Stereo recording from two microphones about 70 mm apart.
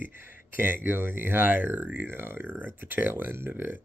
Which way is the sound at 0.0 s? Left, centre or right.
Right.